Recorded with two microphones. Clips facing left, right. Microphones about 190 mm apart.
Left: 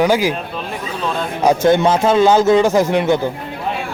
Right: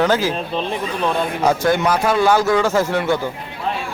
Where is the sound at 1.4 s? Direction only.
20° left (ahead or behind).